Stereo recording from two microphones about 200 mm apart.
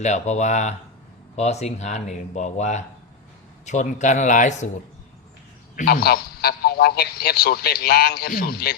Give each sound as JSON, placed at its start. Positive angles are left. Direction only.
{"t": 0.0, "sound": "speech", "side_deg": 35}
{"t": 5.7, "sound": "a man's voice", "side_deg": 50}